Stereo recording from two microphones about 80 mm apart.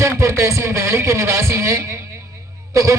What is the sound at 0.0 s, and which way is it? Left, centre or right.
A man's voice, right.